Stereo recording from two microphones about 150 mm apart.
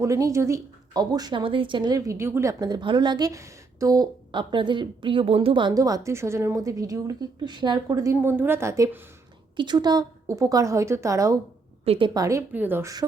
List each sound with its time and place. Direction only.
0.0 s a woman's voice: 20° right (ahead or behind)
9.6 s a woman's voice: 30° right (ahead or behind)
11.9 s a woman's voice: 35° right (ahead or behind); by 12.9 s 15° right (ahead or behind)